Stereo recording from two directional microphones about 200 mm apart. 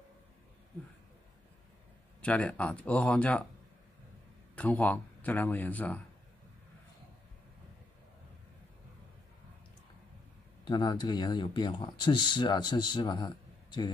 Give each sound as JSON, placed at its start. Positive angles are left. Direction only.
{"t": 2.2, "sound": "speech", "side_deg": 5}
{"t": 4.6, "sound": "speech", "side_deg": 5}
{"t": 10.7, "sound": "speech", "side_deg": 20}